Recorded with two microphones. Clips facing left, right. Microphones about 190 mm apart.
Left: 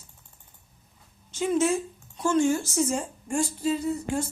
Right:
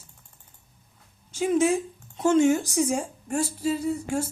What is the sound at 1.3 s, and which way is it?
Speech, 10° right (ahead or behind).